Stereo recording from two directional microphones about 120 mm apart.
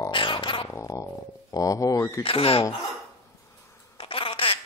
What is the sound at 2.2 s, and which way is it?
Speech, 50° left (ahead or behind).